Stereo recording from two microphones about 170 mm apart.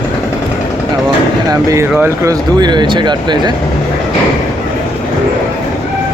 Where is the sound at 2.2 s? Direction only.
25° right (ahead or behind).